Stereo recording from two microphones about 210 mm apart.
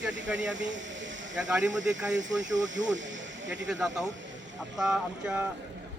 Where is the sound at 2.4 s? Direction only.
60° right (ahead or behind).